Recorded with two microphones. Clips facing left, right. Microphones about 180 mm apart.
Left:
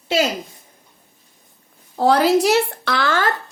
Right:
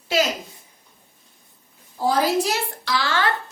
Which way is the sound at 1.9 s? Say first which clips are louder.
Left 5 dB; 70° left (ahead or behind).